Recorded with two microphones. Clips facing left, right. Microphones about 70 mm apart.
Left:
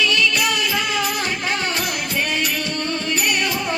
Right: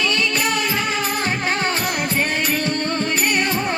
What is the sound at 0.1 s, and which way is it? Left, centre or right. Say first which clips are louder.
Music: left 1 dB; right.